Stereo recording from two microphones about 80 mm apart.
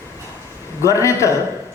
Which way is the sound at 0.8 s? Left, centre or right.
Left.